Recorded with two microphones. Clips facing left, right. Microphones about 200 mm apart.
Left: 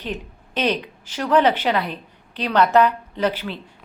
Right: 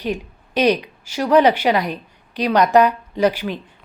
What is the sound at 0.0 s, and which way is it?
A woman's voice, 10° right (ahead or behind).